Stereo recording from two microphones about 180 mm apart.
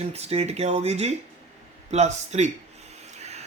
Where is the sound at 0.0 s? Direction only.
35° right (ahead or behind).